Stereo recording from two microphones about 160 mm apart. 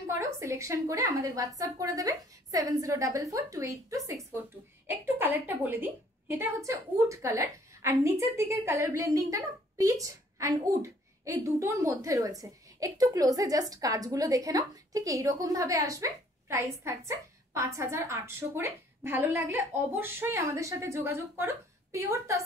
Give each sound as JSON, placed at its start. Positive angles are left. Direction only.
{"t": 0.0, "sound": "a woman's voice", "side_deg": -20}